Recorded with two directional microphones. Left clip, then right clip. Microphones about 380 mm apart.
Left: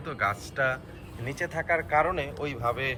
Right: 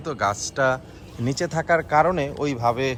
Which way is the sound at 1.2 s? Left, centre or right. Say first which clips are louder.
Right 6 dB; right.